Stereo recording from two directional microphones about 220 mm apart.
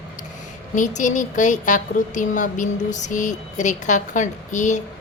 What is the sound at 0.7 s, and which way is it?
A woman's voice, 35° left (ahead or behind).